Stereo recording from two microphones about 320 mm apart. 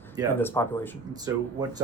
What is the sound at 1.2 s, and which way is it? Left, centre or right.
Speech, centre.